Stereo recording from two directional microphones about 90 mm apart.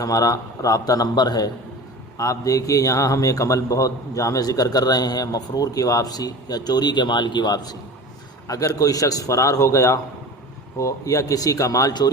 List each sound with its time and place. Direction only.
0.0 s a man's voice: 40° left (ahead or behind)
2.1 s a man's voice: 40° left (ahead or behind)